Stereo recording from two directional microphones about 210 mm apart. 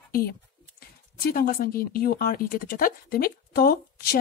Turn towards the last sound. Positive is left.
turn(degrees=45)  # may be behind; listen again after turning